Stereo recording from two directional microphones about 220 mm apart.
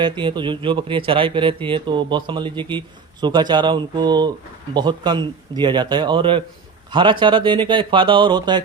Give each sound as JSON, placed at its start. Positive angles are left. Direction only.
{"t": 0.0, "sound": "speech", "side_deg": -20}